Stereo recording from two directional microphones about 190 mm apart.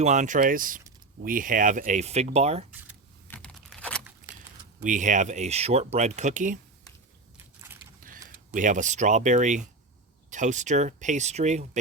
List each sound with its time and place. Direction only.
0.0 s speech: 40° right (ahead or behind)
3.2 s a sound: 10° left (ahead or behind)
4.8 s speech: 40° right (ahead or behind)
8.0 s speech: 45° right (ahead or behind)